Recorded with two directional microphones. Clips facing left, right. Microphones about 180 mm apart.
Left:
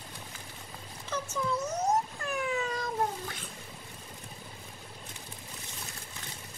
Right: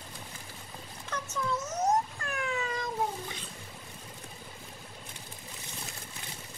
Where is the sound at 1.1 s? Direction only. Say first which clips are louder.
Left 1 dB; centre (ahead or behind).